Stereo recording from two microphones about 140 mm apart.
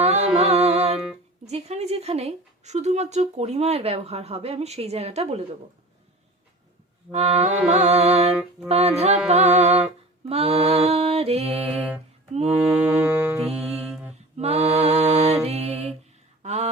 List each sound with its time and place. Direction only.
0.0 s music: 50° right (ahead or behind)
1.5 s speech: 50° right (ahead or behind)
7.1 s speech: 50° right (ahead or behind)
12.5 s mantra: 10° right (ahead or behind)
13.7 s a capella: 5° right (ahead or behind)
14.3 s a capella: 50° right (ahead or behind)
15.1 s music: 50° right (ahead or behind)
16.4 s a sound: 50° right (ahead or behind)